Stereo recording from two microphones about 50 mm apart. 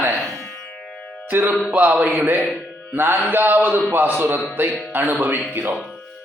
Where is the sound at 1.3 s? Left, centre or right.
Right.